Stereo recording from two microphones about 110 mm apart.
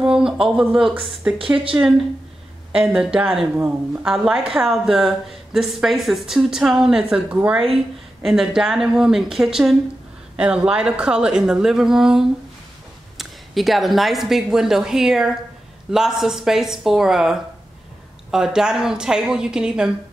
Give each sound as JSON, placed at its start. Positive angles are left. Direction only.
{"t": 0.0, "sound": "a woman's voice", "side_deg": -5}
{"t": 3.5, "sound": "speech", "side_deg": -20}
{"t": 4.0, "sound": "a woman's voice", "side_deg": -5}